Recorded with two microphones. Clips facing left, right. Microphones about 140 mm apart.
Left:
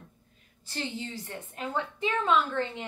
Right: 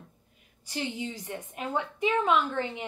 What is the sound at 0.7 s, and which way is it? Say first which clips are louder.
A woman's voice: right 2 dB; 15° right (ahead or behind).